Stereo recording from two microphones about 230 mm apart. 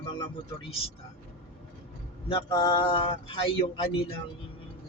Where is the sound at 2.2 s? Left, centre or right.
Left.